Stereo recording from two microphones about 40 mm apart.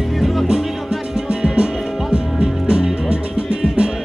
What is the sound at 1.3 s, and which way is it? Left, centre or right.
Music, right.